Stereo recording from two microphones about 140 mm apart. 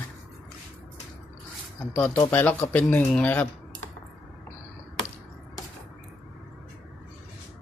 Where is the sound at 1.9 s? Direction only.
5° left (ahead or behind).